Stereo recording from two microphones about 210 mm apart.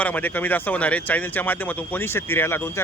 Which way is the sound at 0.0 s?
5° left (ahead or behind).